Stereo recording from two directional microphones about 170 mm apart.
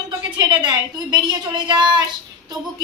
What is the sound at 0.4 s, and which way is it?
A woman's voice, 25° right (ahead or behind).